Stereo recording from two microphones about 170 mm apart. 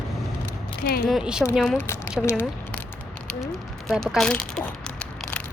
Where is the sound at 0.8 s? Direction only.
60° left (ahead or behind).